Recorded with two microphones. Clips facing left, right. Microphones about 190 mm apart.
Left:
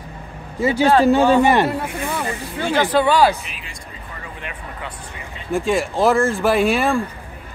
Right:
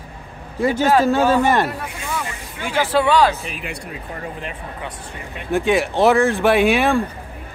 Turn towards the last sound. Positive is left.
turn(degrees=0)  # may be behind; listen again after turning